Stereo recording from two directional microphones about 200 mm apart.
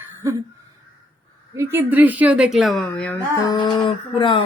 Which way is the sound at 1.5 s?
10° right (ahead or behind).